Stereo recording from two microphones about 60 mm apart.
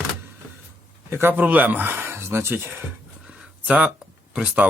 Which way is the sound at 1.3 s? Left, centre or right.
Right.